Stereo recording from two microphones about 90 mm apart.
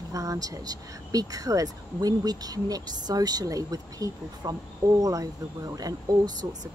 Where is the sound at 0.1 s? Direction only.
40° right (ahead or behind).